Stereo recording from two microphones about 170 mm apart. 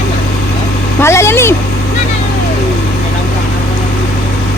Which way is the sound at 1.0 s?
15° left (ahead or behind).